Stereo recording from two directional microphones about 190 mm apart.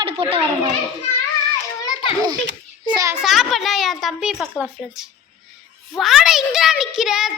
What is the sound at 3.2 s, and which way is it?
A woman's voice, centre (ahead or behind).